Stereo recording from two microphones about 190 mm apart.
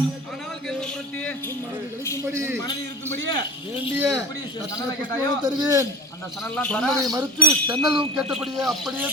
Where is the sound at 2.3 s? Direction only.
15° right (ahead or behind).